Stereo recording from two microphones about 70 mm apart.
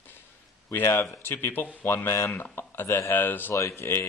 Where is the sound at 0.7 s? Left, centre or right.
Left.